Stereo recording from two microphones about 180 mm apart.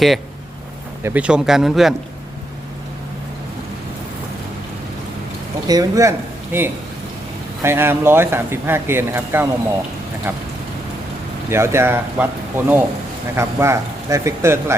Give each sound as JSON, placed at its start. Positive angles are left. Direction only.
{"t": 1.0, "sound": "speech", "side_deg": -5}
{"t": 5.6, "sound": "speech", "side_deg": -20}
{"t": 11.4, "sound": "speech", "side_deg": -15}